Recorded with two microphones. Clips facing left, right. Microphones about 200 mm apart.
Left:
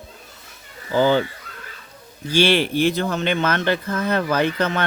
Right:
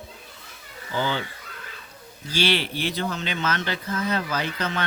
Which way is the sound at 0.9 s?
45° left (ahead or behind).